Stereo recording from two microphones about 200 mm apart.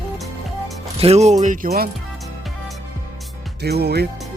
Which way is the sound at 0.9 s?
30° right (ahead or behind).